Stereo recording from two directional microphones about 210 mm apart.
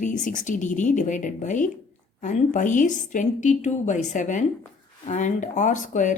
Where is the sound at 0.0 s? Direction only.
35° left (ahead or behind).